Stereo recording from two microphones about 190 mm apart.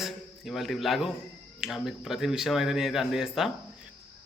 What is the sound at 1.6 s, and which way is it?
A man's voice, centre (ahead or behind).